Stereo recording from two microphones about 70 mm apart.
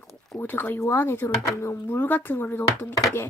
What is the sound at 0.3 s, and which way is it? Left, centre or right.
Speech, left.